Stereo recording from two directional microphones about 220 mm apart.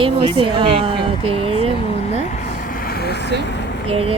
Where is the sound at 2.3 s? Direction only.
40° left (ahead or behind).